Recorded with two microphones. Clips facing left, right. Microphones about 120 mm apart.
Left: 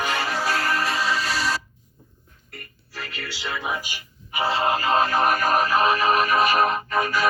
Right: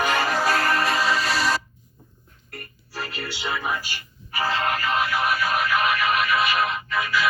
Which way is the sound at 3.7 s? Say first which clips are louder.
Right 1 dB; 15° left (ahead or behind).